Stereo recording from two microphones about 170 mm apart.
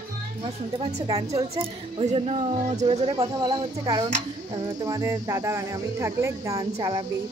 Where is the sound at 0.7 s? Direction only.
35° right (ahead or behind).